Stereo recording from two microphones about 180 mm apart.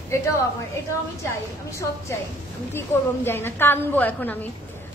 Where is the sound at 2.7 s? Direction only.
15° left (ahead or behind).